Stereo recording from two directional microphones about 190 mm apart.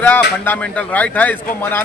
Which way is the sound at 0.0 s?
10° left (ahead or behind).